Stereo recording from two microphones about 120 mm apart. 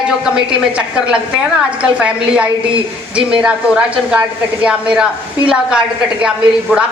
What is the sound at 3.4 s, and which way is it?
Speech, 10° right (ahead or behind).